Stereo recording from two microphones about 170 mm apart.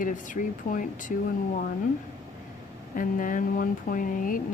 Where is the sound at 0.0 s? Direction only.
50° left (ahead or behind).